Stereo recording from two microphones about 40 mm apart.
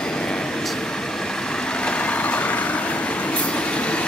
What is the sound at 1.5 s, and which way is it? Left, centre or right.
Vehicle, left.